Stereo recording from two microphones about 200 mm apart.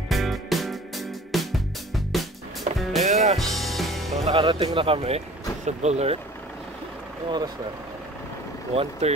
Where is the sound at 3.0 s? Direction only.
35° right (ahead or behind).